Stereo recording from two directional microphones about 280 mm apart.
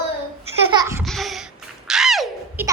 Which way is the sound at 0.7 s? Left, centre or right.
Centre.